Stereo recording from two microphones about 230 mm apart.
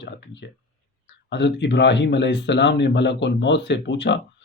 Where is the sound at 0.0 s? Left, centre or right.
Left.